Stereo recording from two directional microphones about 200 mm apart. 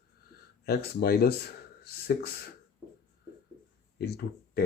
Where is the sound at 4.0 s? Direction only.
55° left (ahead or behind).